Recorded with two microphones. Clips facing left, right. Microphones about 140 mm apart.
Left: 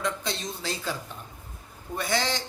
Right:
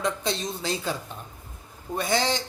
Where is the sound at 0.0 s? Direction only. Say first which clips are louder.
Right 3 dB; 20° right (ahead or behind).